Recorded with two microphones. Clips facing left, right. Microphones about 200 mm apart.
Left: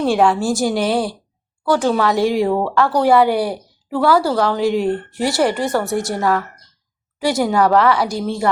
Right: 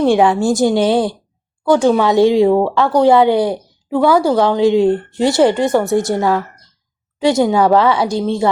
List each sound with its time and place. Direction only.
0.0 s a woman's voice: 20° right (ahead or behind)